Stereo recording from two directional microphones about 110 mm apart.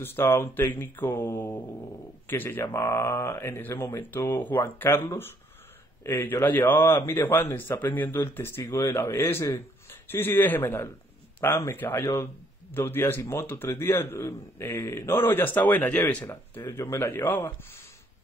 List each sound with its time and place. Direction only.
0.0 s speech: 20° left (ahead or behind)
16.3 s speech: 25° left (ahead or behind)